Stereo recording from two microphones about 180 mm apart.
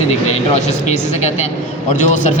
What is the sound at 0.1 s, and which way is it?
Speech, 40° left (ahead or behind).